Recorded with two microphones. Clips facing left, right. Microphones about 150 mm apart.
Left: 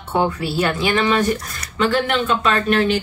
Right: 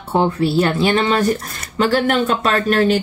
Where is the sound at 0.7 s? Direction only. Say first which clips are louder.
Right 2 dB; 30° right (ahead or behind).